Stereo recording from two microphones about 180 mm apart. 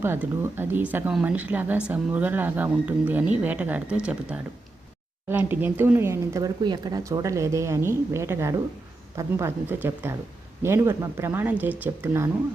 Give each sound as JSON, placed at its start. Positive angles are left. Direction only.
{"t": 0.0, "sound": "speech", "side_deg": -15}